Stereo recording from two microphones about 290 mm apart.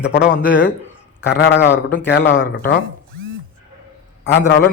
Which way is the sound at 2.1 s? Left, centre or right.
Left.